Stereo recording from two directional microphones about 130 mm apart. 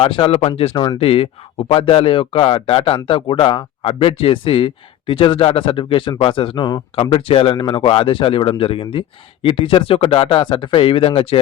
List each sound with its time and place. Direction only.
0.0 s speech: 45° left (ahead or behind)
6.9 s speech: 45° left (ahead or behind)